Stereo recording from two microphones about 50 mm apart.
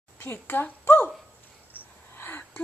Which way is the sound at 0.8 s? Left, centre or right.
Left.